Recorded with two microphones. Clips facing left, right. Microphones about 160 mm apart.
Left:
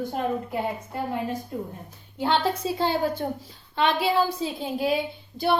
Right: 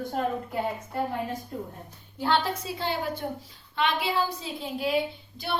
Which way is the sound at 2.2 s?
25° left (ahead or behind).